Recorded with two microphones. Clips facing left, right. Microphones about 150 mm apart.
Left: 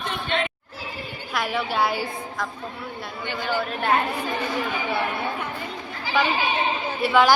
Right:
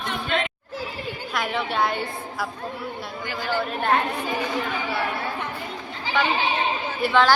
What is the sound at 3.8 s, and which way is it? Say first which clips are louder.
Speech: even; 5° left (ahead or behind).